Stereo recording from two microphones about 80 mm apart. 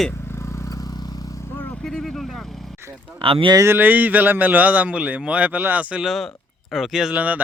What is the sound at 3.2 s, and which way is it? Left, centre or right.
Speech, right.